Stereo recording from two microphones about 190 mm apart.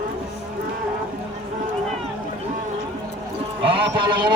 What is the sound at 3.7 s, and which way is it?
Speech, 25° right (ahead or behind).